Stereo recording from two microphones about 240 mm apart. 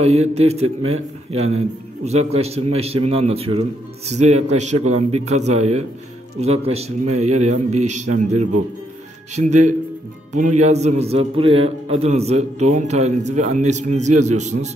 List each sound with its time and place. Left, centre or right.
0.0 s a man's voice: right